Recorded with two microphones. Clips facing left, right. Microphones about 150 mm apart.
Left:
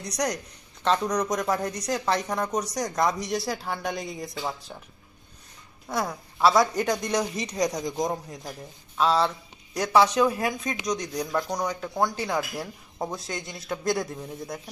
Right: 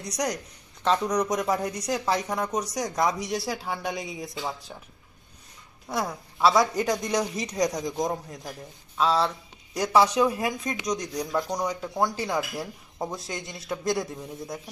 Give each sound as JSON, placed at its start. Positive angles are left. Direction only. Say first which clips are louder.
{"t": 0.2, "sound": "speech", "louder": "left 1 dB", "side_deg": -5}
{"t": 5.9, "sound": "speech", "louder": "left 1 dB", "side_deg": 0}